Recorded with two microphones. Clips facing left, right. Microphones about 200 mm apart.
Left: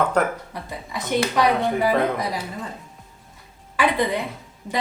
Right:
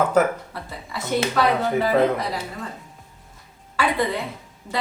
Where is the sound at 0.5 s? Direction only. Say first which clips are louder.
Left 2 dB; 15° left (ahead or behind).